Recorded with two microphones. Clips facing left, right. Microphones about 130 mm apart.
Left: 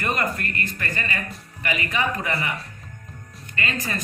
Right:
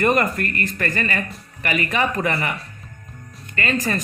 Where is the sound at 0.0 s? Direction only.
55° right (ahead or behind).